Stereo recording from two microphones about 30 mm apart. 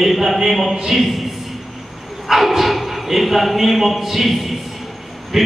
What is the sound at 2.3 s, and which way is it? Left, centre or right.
A man's voice, centre.